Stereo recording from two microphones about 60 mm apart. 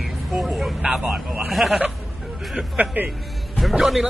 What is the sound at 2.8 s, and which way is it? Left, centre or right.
Speech, right.